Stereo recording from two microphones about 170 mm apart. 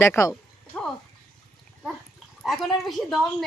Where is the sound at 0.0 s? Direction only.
15° left (ahead or behind).